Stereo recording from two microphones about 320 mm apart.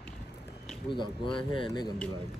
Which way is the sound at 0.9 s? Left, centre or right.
Centre.